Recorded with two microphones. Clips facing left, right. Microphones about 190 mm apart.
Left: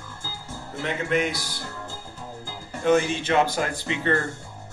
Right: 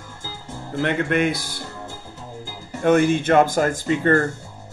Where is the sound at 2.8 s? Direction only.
55° right (ahead or behind).